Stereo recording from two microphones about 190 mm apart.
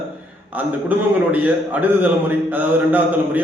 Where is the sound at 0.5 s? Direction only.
10° right (ahead or behind).